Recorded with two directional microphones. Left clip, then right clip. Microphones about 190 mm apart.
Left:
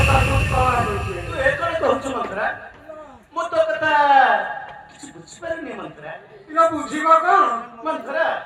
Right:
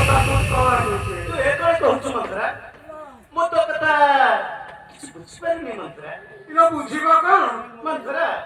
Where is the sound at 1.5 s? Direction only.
20° left (ahead or behind).